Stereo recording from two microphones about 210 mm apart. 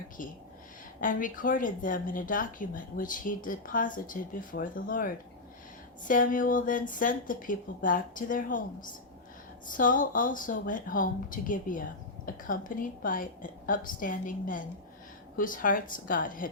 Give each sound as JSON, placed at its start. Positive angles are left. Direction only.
{"t": 0.2, "sound": "speech", "side_deg": 40}